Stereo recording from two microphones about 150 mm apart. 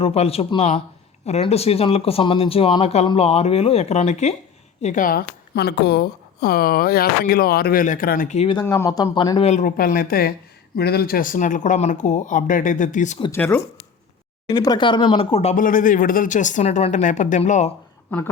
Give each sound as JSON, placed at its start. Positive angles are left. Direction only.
{"t": 0.0, "sound": "speech", "side_deg": 40}
{"t": 8.4, "sound": "speech", "side_deg": 35}
{"t": 8.6, "sound": "speech", "side_deg": 15}
{"t": 8.9, "sound": "speech", "side_deg": 25}
{"t": 9.4, "sound": "speech", "side_deg": 45}
{"t": 9.6, "sound": "speech", "side_deg": 70}
{"t": 13.3, "sound": "speech", "side_deg": 10}
{"t": 14.4, "sound": "speech", "side_deg": 25}
{"t": 15.5, "sound": "speech", "side_deg": 65}